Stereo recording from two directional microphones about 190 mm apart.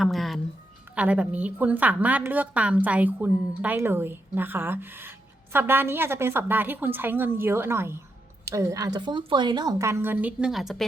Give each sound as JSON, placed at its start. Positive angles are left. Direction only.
{"t": 0.0, "sound": "a woman's voice", "side_deg": 0}